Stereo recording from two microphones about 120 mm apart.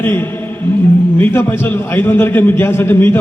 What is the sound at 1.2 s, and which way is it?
A man's voice, 20° left (ahead or behind).